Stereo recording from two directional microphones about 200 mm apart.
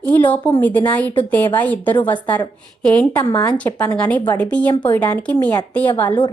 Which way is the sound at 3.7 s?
15° left (ahead or behind).